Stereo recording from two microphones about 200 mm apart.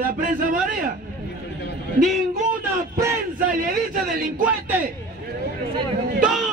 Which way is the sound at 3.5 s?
45° right (ahead or behind).